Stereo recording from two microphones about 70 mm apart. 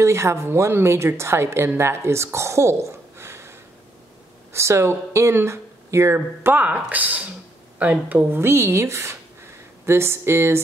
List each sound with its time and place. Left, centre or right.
0.0 s a woman's voice: right
8.3 s speech: right